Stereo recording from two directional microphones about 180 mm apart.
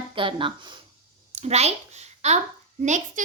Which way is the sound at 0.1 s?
30° right (ahead or behind).